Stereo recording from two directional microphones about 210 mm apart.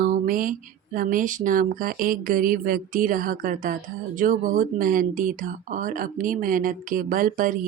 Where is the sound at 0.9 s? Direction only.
40° right (ahead or behind).